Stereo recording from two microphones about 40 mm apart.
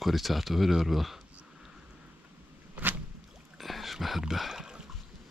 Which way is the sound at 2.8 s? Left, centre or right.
Right.